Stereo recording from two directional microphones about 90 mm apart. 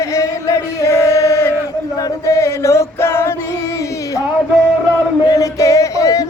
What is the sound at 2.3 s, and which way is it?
Chant, 35° left (ahead or behind).